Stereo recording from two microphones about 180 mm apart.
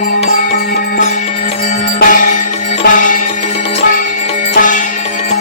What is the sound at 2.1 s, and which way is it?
Music, 45° left (ahead or behind).